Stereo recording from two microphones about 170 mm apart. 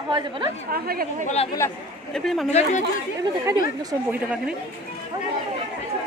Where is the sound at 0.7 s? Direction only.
60° right (ahead or behind).